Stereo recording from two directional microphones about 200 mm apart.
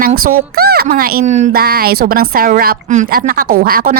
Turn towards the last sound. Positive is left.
turn(degrees=-45)  # may be behind; listen again after turning